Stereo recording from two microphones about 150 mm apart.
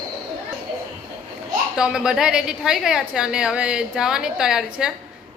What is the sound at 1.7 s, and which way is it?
A woman's voice, 5° right (ahead or behind).